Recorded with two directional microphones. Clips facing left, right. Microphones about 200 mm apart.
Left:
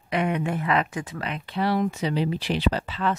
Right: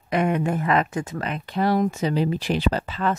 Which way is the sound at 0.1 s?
45° right (ahead or behind).